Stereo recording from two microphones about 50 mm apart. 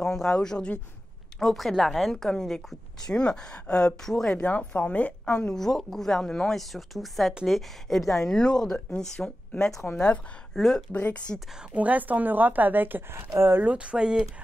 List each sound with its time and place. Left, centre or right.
0.0 s speech: centre
1.4 s speech: centre
2.1 s speech: centre
4.0 s speech: centre
4.4 s a woman's voice: left
5.5 s speech: centre
6.7 s a woman's voice: centre; by 10.2 s left
10.5 s speech: centre
10.9 s a woman's voice: left
11.7 s a woman's voice: right
13.1 s speech: right
13.6 s speech: right